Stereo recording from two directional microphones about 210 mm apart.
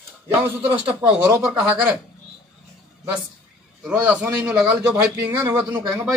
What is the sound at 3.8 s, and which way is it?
A man's voice, 5° right (ahead or behind).